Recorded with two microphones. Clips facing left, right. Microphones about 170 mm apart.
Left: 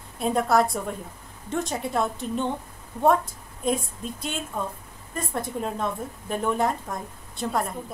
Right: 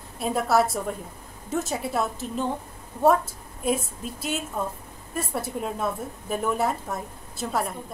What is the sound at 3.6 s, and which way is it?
A woman's voice, 5° right (ahead or behind).